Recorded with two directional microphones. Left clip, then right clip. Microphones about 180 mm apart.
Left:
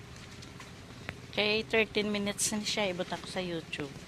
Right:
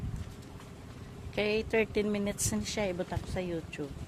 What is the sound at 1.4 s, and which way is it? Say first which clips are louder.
A woman's voice: left 1 dB; 15° right (ahead or behind).